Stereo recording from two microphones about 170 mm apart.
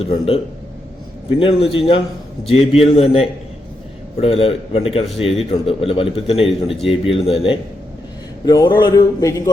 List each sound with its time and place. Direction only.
1.4 s a man's voice: 35° left (ahead or behind)